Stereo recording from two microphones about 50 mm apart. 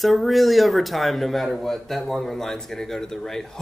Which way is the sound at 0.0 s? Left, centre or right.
Centre.